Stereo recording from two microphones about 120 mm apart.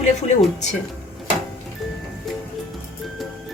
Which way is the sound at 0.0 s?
70° left (ahead or behind).